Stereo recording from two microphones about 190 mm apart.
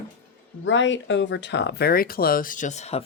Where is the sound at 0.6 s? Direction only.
75° left (ahead or behind); by 3.0 s 35° left (ahead or behind).